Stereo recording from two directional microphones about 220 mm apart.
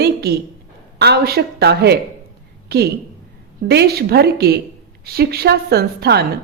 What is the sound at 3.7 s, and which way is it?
A woman's voice, 45° right (ahead or behind).